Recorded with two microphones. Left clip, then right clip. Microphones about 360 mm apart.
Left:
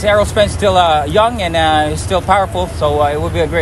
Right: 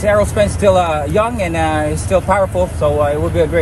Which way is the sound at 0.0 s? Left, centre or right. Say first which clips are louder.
Left 1 dB; centre.